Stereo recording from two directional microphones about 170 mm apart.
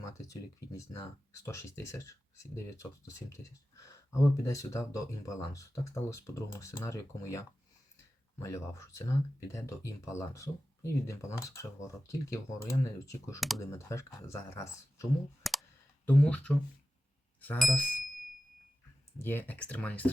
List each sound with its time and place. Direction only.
0.0 s speech: 20° left (ahead or behind)
15.4 s clicking: centre (ahead or behind)
16.0 s speech: 5° left (ahead or behind)
19.2 s speech: 10° left (ahead or behind)